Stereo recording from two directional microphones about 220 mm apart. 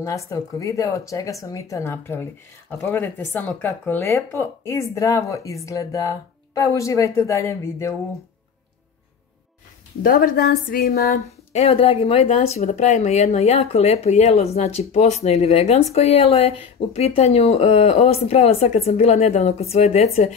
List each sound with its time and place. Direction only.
0.0 s speech: 15° left (ahead or behind)
10.0 s a woman's voice: 40° left (ahead or behind)
11.2 s speech: 30° left (ahead or behind)